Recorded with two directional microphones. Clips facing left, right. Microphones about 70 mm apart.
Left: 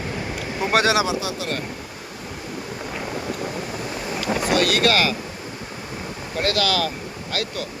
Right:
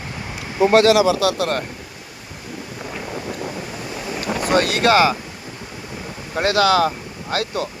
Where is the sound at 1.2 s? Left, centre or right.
Right.